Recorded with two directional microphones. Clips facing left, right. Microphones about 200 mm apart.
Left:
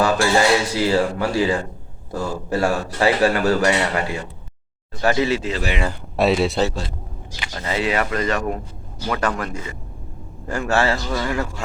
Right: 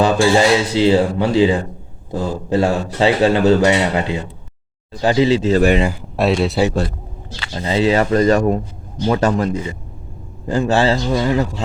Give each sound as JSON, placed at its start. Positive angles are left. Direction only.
{"t": 0.0, "sound": "a man's voice", "side_deg": -20}
{"t": 5.3, "sound": "speech", "side_deg": -30}
{"t": 5.5, "sound": "speech", "side_deg": -50}
{"t": 5.9, "sound": "speech", "side_deg": 0}
{"t": 7.3, "sound": "a sound", "side_deg": 15}
{"t": 7.5, "sound": "a man's voice", "side_deg": -25}